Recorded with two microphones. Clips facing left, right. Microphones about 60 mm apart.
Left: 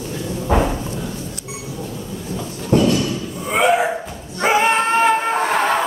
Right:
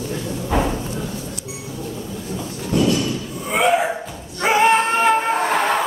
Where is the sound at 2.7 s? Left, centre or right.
Left.